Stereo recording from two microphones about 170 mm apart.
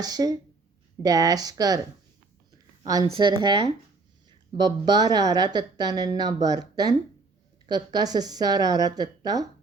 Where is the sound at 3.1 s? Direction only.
25° right (ahead or behind).